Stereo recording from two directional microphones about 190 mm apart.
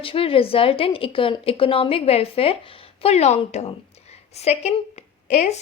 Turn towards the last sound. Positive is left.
turn(degrees=35)  # may be behind; listen again after turning